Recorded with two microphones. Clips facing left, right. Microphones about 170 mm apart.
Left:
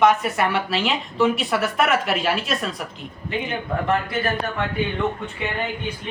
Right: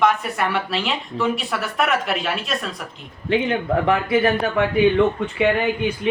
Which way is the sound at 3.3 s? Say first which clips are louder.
Right 8 dB; 90° right.